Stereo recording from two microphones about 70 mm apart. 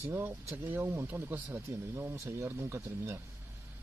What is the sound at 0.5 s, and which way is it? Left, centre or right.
Speech, right.